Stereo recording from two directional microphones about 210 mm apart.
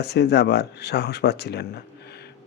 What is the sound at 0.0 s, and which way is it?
Speech, 50° left (ahead or behind).